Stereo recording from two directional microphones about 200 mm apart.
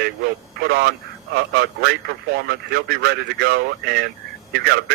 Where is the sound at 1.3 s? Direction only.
55° right (ahead or behind).